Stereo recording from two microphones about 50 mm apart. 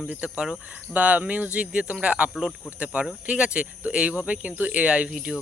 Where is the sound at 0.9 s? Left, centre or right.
Right.